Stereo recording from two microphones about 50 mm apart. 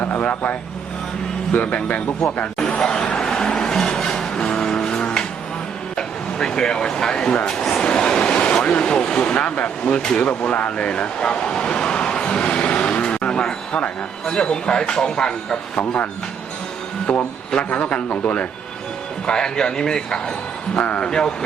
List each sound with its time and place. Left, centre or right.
0.0 s speech: left
1.5 s speech: left
2.6 s a man's voice: centre
3.2 s music: centre
6.0 s a man's voice: centre
7.8 s a sound: centre
8.6 s speech: left
10.2 s vehicle: left
14.3 s a man's voice: centre
17.1 s a man's voice: left
20.7 s speech: left